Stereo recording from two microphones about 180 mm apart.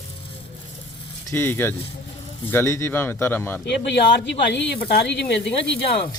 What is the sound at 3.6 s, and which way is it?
Speech, 70° left (ahead or behind).